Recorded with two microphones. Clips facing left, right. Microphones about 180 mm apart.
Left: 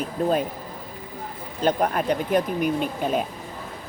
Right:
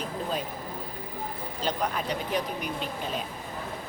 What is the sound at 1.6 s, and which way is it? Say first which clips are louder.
Speech: left 8 dB; 50° left (ahead or behind).